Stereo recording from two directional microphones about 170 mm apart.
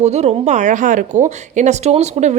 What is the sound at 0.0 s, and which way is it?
Speech, 40° right (ahead or behind).